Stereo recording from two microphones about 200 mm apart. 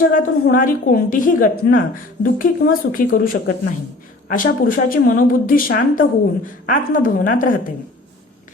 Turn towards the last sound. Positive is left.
turn(degrees=45)  # may be behind; listen again after turning